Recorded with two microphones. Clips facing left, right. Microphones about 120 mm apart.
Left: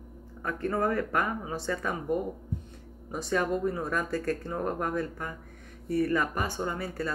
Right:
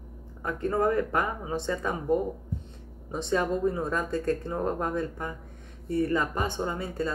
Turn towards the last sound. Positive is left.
turn(degrees=-20)  # may be behind; listen again after turning